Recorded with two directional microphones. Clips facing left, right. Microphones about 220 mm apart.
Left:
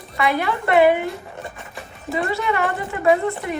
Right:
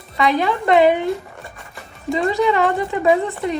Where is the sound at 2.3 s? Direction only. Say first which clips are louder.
Right 7 dB; 15° right (ahead or behind).